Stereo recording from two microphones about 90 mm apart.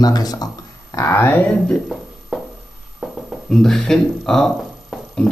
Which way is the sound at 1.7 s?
Centre (ahead or behind).